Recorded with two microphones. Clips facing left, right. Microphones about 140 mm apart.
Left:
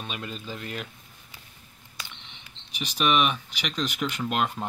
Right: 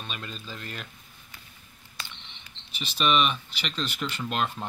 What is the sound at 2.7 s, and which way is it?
Speech, 10° left (ahead or behind).